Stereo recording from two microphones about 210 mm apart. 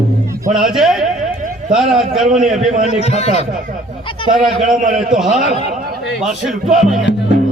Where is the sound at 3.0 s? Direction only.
30° left (ahead or behind).